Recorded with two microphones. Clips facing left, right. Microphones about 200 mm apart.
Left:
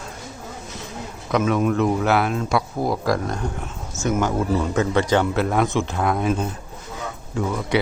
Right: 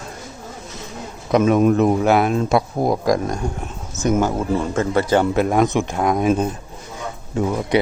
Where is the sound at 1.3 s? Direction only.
25° right (ahead or behind).